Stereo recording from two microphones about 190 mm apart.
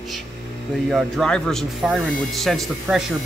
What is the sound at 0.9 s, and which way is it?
Speech, centre (ahead or behind).